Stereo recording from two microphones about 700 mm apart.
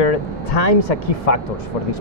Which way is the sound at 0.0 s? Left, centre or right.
Left.